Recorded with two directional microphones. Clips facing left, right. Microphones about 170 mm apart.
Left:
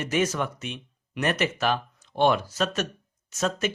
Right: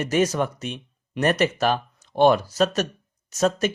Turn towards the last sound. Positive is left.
turn(degrees=-40)  # may be behind; listen again after turning